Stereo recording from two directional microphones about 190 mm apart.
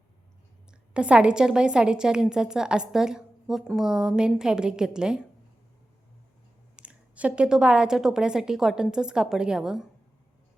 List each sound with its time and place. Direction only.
0.7 s a woman's voice: 5° right (ahead or behind)
6.7 s a woman's voice: 5° right (ahead or behind)